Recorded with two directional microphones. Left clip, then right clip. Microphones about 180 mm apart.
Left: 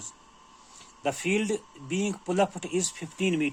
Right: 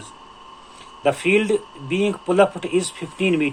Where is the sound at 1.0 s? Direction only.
40° left (ahead or behind).